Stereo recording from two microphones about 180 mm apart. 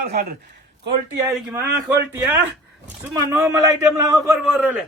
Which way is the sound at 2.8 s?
15° right (ahead or behind).